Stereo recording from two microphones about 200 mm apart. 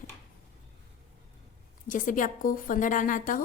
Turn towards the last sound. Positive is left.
turn(degrees=45)  # may be behind; listen again after turning